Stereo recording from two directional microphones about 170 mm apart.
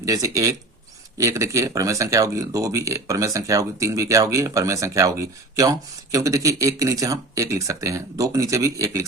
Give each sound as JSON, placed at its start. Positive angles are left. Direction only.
{"t": 0.0, "sound": "speech", "side_deg": -20}